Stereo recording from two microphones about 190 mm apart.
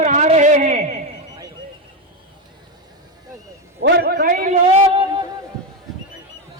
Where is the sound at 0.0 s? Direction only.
40° right (ahead or behind).